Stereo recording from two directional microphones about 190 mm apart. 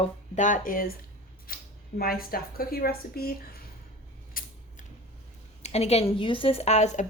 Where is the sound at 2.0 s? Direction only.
50° left (ahead or behind).